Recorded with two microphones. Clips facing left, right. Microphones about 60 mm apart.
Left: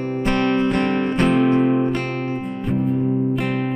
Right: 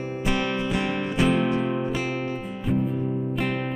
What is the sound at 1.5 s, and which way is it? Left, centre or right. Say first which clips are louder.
Music: left 8 dB; left.